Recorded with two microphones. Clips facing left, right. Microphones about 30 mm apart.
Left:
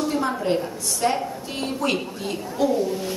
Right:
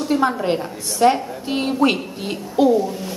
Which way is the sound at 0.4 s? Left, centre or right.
Right.